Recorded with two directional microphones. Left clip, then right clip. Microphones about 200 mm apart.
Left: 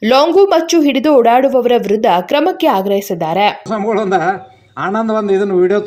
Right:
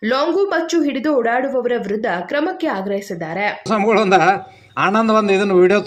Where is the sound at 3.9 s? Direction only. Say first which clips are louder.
Right 1 dB; 20° right (ahead or behind).